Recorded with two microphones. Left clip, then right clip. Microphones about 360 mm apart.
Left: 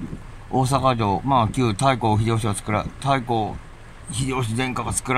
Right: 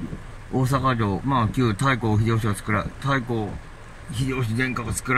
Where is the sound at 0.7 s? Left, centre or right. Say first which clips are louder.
Left 3 dB; centre.